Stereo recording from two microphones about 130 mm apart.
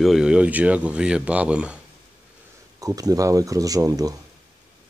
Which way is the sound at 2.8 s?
30° right (ahead or behind).